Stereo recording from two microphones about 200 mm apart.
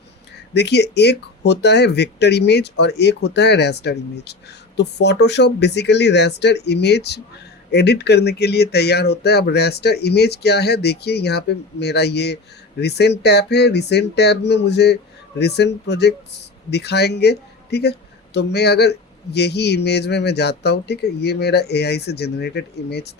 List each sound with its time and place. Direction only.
0.5 s speech: 60° left (ahead or behind)